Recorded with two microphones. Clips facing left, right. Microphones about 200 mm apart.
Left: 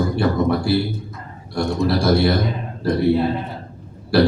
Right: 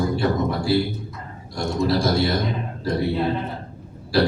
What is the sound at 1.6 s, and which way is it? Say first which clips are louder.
Speech: left 2 dB; 60° left (ahead or behind).